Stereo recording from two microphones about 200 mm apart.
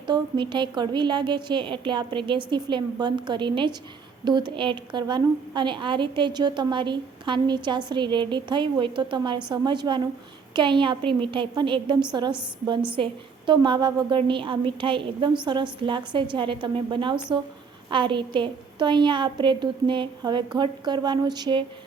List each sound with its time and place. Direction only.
0.1 s a woman's voice: 25° right (ahead or behind)